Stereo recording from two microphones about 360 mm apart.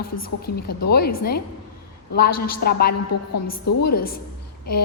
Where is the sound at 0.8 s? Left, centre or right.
Left.